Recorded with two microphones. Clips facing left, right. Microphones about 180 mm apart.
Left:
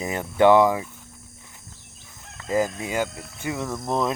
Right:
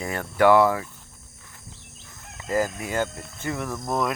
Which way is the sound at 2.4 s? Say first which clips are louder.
Left 1 dB; 15° left (ahead or behind).